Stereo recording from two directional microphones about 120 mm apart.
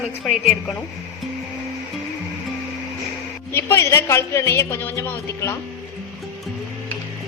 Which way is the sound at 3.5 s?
20° left (ahead or behind).